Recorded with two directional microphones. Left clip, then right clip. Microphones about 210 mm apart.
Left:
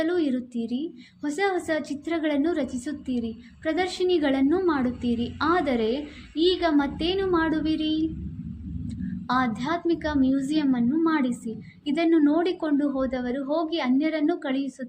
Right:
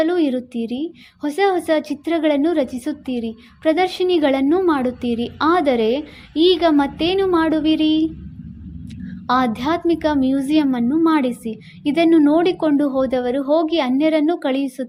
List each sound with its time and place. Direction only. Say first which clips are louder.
0.0 s a woman's voice: right 7 dB; 40° right (ahead or behind)